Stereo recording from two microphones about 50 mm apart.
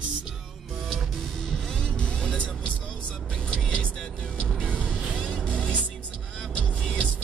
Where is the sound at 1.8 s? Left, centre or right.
Left.